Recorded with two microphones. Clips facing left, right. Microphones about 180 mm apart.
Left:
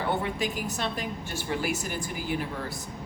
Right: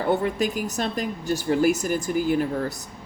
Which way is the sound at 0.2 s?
45° right (ahead or behind).